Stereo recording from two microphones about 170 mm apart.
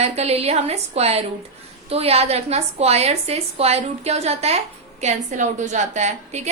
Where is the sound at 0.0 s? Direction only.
40° right (ahead or behind).